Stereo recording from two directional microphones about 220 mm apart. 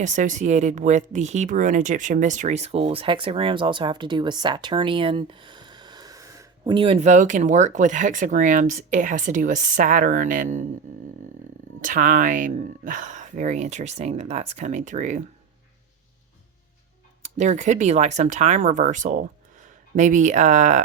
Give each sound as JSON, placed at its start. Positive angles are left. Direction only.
{"t": 0.0, "sound": "speech", "side_deg": -35}
{"t": 11.8, "sound": "speech", "side_deg": -35}
{"t": 17.2, "sound": "speech", "side_deg": -35}